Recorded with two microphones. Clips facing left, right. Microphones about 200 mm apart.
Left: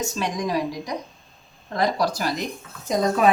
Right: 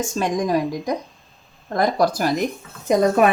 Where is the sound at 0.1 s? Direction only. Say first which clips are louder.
Right 5 dB; 50° right (ahead or behind).